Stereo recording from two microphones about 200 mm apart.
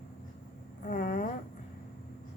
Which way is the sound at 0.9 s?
40° left (ahead or behind).